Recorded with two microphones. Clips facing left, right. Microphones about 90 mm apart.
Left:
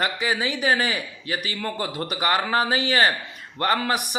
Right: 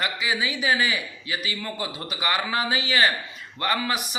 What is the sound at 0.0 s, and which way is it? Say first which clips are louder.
A man's voice: left 2 dB; 45° left (ahead or behind).